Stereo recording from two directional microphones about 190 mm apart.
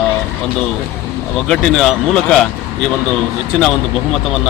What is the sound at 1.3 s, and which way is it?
A man's voice, centre (ahead or behind).